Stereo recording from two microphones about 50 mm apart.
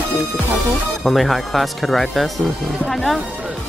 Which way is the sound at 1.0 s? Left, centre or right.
Centre.